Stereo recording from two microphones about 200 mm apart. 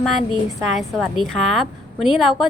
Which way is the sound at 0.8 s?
Centre (ahead or behind).